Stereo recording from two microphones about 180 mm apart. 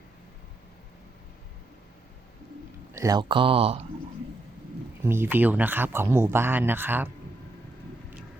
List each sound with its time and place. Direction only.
2.9 s speech: 20° right (ahead or behind)
5.0 s speech: 10° right (ahead or behind)